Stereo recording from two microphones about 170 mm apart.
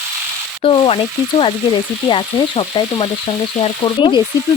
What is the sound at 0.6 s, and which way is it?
Frying, 35° left (ahead or behind).